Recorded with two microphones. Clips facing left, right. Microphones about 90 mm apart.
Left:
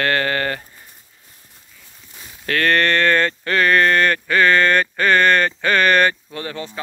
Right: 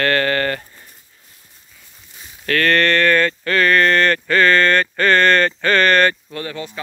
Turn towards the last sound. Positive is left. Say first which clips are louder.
# right 1 dB
turn(degrees=30)  # may be behind; listen again after turning